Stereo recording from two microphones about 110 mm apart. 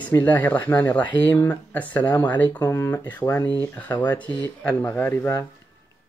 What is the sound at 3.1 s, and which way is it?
Speech, 15° left (ahead or behind).